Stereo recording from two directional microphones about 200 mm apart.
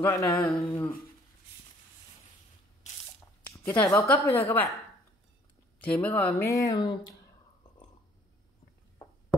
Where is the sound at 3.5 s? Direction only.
15° left (ahead or behind).